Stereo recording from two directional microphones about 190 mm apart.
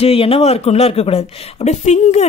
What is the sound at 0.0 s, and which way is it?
Speech, 30° left (ahead or behind).